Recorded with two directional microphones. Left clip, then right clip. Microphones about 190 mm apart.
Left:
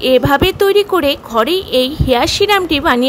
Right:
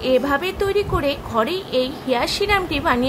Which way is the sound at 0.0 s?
45° left (ahead or behind).